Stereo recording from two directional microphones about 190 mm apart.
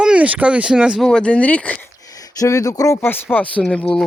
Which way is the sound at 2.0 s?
20° left (ahead or behind).